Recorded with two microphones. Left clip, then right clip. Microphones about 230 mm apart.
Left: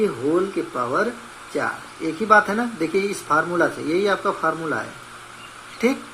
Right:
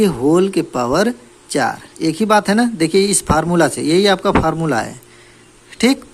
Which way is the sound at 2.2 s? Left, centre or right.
Right.